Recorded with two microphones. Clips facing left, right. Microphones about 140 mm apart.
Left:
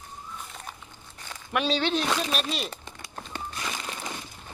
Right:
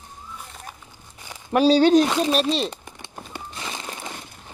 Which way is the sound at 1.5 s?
35° right (ahead or behind).